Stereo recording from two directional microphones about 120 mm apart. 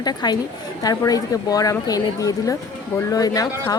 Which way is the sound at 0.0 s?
35° left (ahead or behind).